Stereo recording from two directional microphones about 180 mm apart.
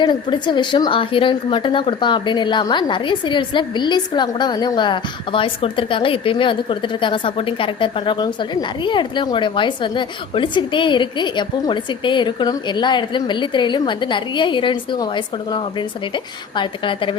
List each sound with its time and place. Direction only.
0.0 s speech: 25° left (ahead or behind)